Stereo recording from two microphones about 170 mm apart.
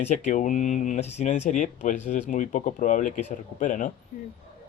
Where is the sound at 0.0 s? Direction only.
45° left (ahead or behind).